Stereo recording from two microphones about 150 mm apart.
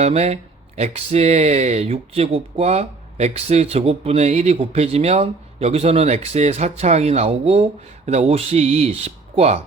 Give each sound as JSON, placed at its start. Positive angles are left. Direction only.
{"t": 0.0, "sound": "speech", "side_deg": -45}